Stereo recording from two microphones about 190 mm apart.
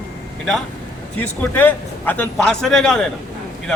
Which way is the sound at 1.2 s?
10° left (ahead or behind).